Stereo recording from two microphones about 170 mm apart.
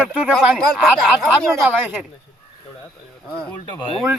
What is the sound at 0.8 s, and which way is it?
Speech, 5° right (ahead or behind).